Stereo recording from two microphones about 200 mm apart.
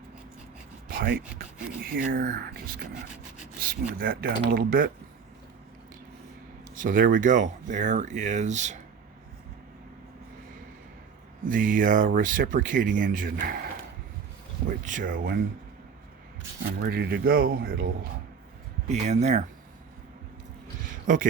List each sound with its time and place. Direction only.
0.9 s a sound: 45° right (ahead or behind)
1.8 s speech: 45° right (ahead or behind)
6.7 s speech: 40° right (ahead or behind)
11.4 s speech: 40° right (ahead or behind)
14.7 s speech: 40° right (ahead or behind)
16.6 s speech: 50° right (ahead or behind)
18.9 s speech: 35° right (ahead or behind)